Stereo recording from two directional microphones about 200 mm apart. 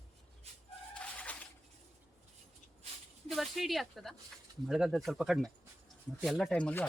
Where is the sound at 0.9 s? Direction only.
5° left (ahead or behind).